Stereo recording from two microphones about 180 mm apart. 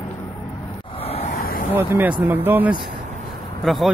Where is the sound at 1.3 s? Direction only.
55° left (ahead or behind).